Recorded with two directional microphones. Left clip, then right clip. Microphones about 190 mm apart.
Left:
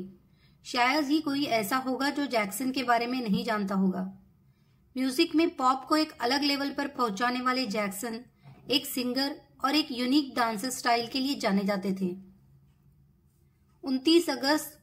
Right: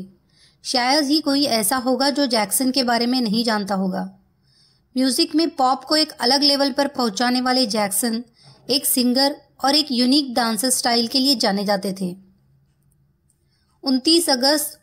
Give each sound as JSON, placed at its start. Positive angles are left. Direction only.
{"t": 0.6, "sound": "speech", "side_deg": -35}
{"t": 13.8, "sound": "speech", "side_deg": -35}